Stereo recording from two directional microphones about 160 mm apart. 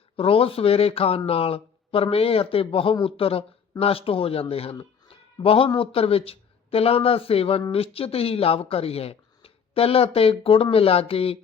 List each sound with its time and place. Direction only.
0.2 s a man's voice: 35° left (ahead or behind)